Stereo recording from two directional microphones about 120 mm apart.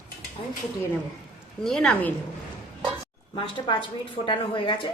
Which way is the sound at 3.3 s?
45° left (ahead or behind).